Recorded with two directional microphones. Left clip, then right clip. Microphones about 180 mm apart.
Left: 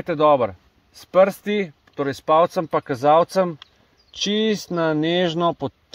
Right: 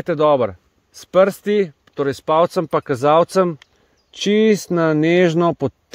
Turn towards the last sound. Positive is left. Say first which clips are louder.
# right 4 dB
turn(degrees=-55)  # may be behind; listen again after turning